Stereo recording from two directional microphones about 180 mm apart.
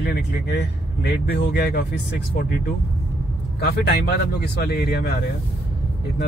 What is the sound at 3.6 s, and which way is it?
Speech, 65° left (ahead or behind).